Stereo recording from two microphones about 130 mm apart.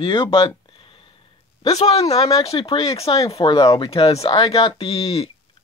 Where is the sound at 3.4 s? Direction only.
30° left (ahead or behind).